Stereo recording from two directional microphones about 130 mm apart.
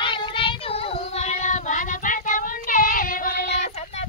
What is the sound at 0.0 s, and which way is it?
Child singing, 40° left (ahead or behind).